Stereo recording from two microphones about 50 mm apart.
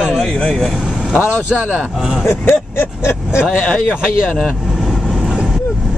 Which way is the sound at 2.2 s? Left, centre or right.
Left.